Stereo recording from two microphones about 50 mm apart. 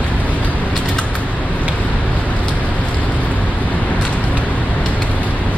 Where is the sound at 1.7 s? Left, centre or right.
Left.